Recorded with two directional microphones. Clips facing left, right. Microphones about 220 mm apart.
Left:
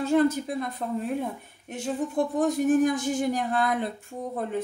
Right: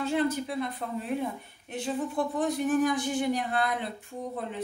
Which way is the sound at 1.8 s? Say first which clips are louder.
Left 3 dB; 45° left (ahead or behind).